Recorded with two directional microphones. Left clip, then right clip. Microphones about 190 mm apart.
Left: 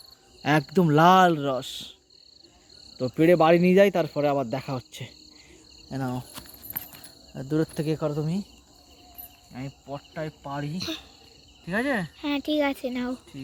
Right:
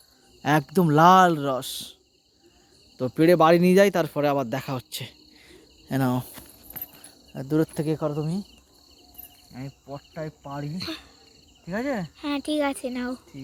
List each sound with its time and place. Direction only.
0.4 s speech: 10° right (ahead or behind)
3.0 s speech: 15° right (ahead or behind)
5.9 s cricket: 65° right (ahead or behind)
7.3 s speech: 25° right (ahead or behind)
9.5 s speech: 20° right (ahead or behind)
10.8 s speech: centre (ahead or behind)